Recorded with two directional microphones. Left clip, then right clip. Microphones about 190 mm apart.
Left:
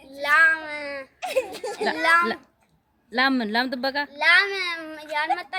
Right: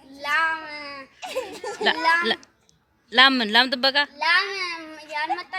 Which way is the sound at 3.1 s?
5° left (ahead or behind).